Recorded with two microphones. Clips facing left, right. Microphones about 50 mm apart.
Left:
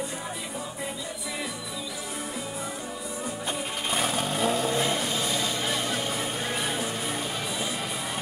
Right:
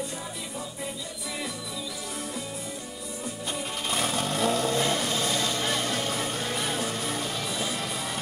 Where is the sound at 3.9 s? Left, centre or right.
Centre.